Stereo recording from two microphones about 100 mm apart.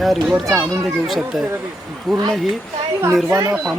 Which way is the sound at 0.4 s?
30° right (ahead or behind).